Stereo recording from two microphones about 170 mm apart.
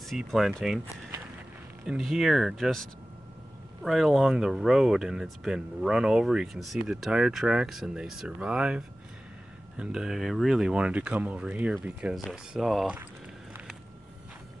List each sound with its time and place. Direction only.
0.0 s speech: centre (ahead or behind)
1.9 s speech: centre (ahead or behind)